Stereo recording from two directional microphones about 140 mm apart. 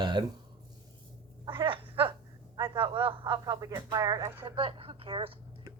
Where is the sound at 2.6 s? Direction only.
35° right (ahead or behind); by 4.4 s 20° right (ahead or behind).